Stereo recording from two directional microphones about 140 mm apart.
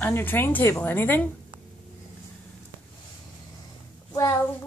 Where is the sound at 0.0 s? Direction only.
15° left (ahead or behind).